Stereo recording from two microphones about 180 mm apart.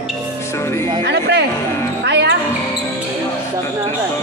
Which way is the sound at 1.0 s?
70° right (ahead or behind).